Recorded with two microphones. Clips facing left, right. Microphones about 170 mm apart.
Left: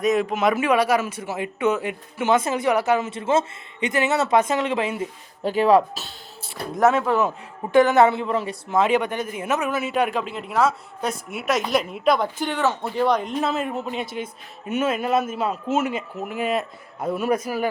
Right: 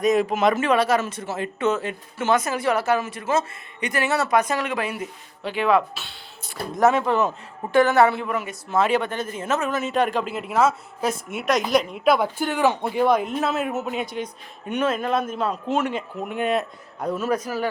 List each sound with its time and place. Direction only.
0.0 s a man's voice: centre (ahead or behind)
0.5 s speech: 10° left (ahead or behind)
5.4 s speech: 40° left (ahead or behind)
6.7 s speech: 5° left (ahead or behind); by 8.5 s 30° left (ahead or behind)
8.7 s a man's voice: 15° left (ahead or behind)